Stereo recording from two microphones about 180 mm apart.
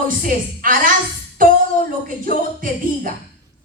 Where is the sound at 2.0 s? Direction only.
50° right (ahead or behind).